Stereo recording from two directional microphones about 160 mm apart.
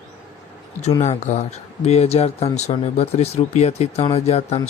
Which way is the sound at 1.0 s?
45° left (ahead or behind).